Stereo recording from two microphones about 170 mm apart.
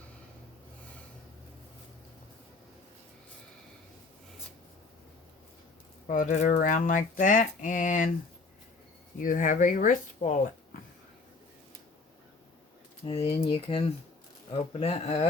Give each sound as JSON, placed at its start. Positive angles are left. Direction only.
{"t": 6.1, "sound": "speech", "side_deg": 50}
{"t": 9.2, "sound": "speech", "side_deg": 50}
{"t": 13.2, "sound": "speech", "side_deg": 35}